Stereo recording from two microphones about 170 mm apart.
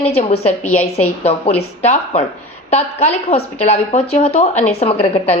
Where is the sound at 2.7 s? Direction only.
40° left (ahead or behind).